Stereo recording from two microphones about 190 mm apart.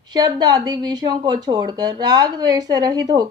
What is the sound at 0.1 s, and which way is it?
Speech, 20° right (ahead or behind).